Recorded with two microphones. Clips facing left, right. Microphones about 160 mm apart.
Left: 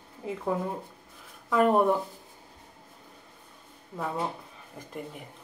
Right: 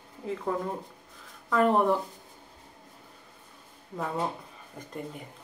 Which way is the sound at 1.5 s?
10° left (ahead or behind).